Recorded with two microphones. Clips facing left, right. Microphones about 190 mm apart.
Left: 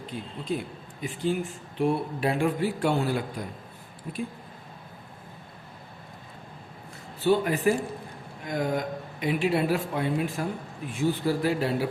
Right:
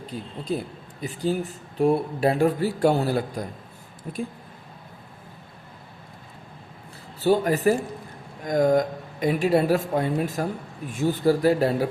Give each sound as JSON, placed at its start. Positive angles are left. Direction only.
{"t": 0.1, "sound": "speech", "side_deg": -40}
{"t": 7.2, "sound": "speech", "side_deg": -40}